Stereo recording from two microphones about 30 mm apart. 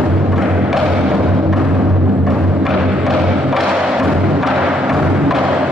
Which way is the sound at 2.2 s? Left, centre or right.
Centre.